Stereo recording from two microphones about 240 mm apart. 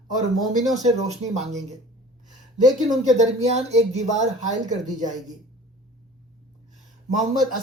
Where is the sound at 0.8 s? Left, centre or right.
Right.